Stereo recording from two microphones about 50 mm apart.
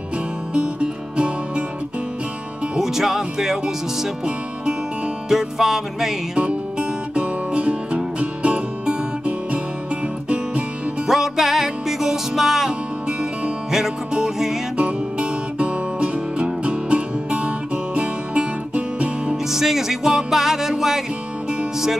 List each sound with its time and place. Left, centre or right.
0.6 s music: right
2.7 s speech: centre
5.3 s speech: centre
6.3 s music: centre
11.1 s music: centre
14.8 s music: right
19.5 s music: centre